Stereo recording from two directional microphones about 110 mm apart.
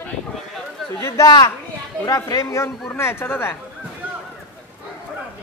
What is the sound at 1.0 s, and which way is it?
Speech, 30° left (ahead or behind).